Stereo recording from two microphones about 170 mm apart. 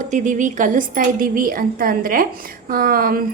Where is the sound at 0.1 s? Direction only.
45° right (ahead or behind).